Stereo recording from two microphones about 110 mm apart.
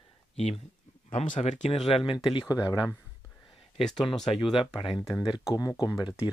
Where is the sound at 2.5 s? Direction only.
35° left (ahead or behind).